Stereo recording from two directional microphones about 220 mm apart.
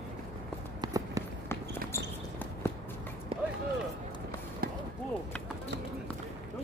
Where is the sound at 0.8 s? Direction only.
15° right (ahead or behind).